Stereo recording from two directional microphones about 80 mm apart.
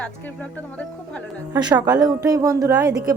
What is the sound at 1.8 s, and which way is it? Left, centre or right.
Speech, right.